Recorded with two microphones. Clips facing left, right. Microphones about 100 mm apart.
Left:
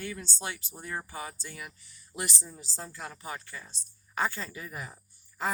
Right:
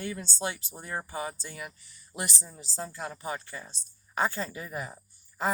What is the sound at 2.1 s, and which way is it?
Speech, 10° right (ahead or behind).